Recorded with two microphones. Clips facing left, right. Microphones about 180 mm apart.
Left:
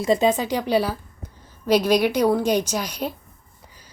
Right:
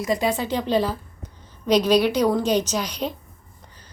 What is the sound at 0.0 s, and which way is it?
A woman's voice, 25° left (ahead or behind).